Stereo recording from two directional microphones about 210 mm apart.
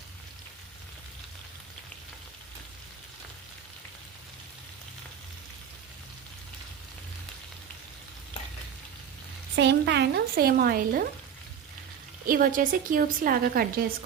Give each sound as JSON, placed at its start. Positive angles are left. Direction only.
{"t": 9.6, "sound": "a woman's voice", "side_deg": -55}
{"t": 12.2, "sound": "a woman's voice", "side_deg": -40}